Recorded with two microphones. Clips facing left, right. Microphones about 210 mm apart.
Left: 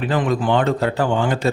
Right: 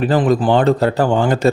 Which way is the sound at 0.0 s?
35° right (ahead or behind).